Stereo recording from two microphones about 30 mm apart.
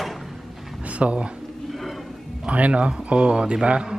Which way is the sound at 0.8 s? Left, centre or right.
Right.